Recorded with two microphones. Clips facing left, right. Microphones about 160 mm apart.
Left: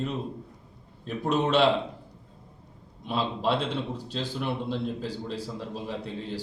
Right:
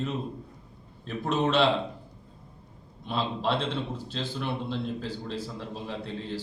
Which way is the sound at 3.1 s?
10° left (ahead or behind).